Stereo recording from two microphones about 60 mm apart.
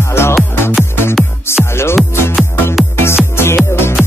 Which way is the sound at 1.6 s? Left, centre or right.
Left.